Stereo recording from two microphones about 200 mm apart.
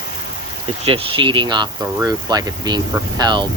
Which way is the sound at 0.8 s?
25° right (ahead or behind).